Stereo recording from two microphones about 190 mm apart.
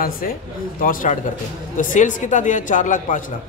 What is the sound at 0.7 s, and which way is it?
A man's voice, 45° left (ahead or behind).